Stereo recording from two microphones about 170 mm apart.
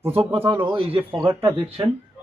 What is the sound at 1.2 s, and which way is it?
Speech, 15° right (ahead or behind).